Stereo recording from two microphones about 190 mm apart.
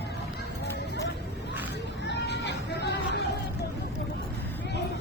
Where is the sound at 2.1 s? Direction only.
65° left (ahead or behind).